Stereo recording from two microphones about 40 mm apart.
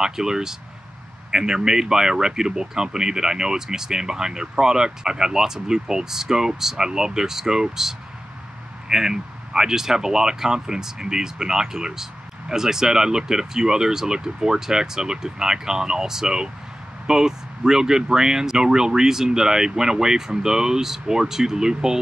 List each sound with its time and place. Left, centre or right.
0.0 s speech: centre